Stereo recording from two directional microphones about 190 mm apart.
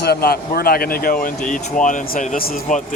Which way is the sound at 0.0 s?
55° left (ahead or behind).